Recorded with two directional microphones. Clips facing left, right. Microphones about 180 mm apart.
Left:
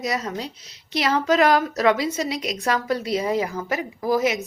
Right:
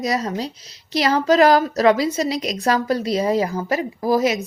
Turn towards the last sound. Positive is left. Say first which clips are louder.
# right 3 dB
turn(degrees=-35)  # may be behind; listen again after turning